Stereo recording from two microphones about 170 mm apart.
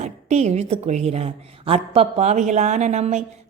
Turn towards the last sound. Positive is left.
turn(degrees=-40)  # may be behind; listen again after turning